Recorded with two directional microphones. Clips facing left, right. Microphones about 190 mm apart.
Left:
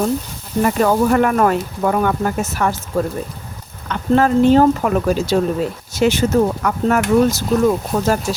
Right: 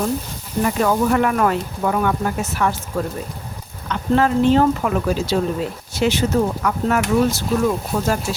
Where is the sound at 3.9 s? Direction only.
45° left (ahead or behind).